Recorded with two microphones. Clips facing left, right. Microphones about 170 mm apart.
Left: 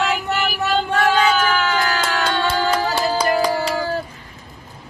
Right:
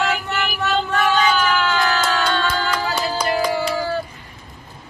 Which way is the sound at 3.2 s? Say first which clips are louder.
Even; 35° left (ahead or behind).